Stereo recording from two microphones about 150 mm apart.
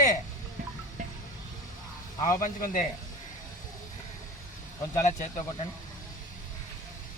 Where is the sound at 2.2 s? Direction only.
65° left (ahead or behind).